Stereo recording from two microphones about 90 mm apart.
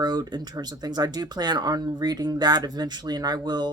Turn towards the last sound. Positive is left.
turn(degrees=-50)  # may be behind; listen again after turning